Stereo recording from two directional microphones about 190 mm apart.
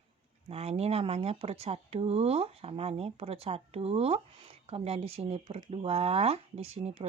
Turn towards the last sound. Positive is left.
turn(degrees=-35)  # may be behind; listen again after turning